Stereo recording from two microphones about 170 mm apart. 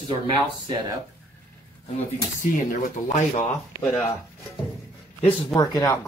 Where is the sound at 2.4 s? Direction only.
50° left (ahead or behind).